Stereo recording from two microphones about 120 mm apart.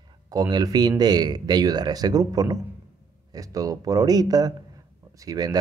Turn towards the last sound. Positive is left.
turn(degrees=-30)  # may be behind; listen again after turning